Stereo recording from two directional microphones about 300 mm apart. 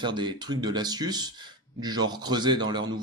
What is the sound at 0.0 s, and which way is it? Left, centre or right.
A man's voice, centre.